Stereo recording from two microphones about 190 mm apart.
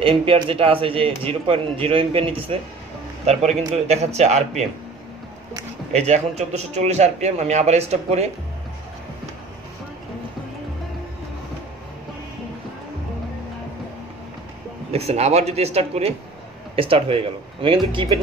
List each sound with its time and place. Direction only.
0.0 s speech: 30° right (ahead or behind)
5.9 s speech: 35° right (ahead or behind)
14.9 s speech: 35° right (ahead or behind)